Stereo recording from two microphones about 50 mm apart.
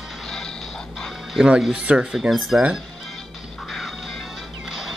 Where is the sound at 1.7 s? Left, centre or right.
Right.